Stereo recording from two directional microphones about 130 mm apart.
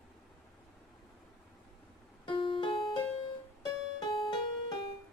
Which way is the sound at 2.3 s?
40° left (ahead or behind).